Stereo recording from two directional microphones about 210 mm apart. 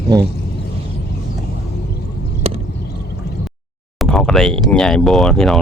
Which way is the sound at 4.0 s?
5° left (ahead or behind).